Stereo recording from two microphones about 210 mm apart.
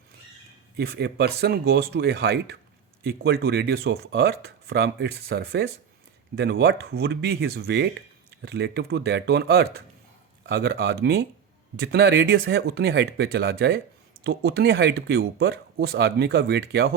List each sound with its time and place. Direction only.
0.8 s speech: 50° right (ahead or behind)